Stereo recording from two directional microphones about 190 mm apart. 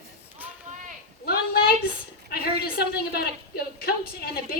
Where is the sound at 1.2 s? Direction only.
55° left (ahead or behind).